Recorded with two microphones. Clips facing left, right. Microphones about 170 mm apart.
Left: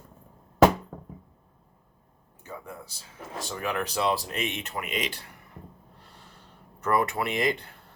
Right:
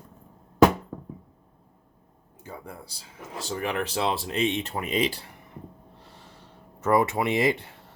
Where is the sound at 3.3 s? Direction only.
30° right (ahead or behind).